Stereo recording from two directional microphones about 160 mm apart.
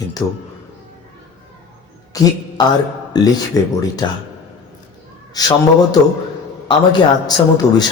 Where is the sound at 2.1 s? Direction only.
20° left (ahead or behind).